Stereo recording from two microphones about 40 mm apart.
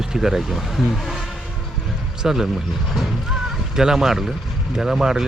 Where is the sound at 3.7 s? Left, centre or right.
Centre.